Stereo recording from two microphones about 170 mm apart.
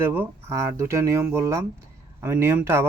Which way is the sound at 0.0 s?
15° right (ahead or behind).